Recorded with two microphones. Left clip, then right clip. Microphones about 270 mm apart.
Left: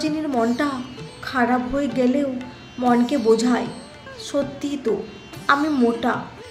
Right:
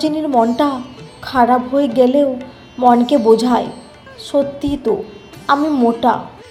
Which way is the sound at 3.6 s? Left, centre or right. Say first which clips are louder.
Right 3 dB; centre.